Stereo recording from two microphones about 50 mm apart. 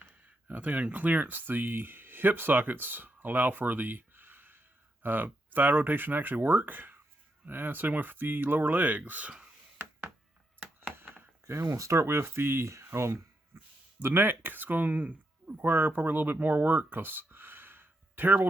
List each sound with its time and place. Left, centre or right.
0.4 s speech: right
10.9 s a sound: right
11.4 s speech: right
13.5 s a sound: right
14.0 s speech: right
15.6 s speech: right